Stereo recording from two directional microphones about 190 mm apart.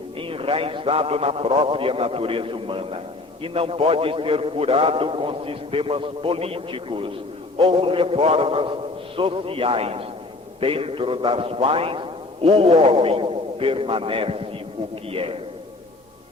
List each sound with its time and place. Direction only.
0.2 s a man's voice: 30° right (ahead or behind)